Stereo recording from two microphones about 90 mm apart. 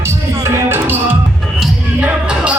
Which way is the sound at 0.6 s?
25° right (ahead or behind).